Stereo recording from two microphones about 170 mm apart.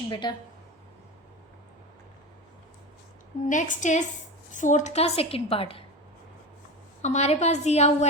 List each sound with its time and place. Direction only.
0.1 s a woman's voice: 25° left (ahead or behind)
3.5 s a woman's voice: 50° left (ahead or behind)
7.0 s a woman's voice: 40° left (ahead or behind)